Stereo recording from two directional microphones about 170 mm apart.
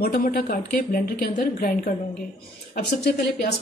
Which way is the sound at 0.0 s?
60° left (ahead or behind).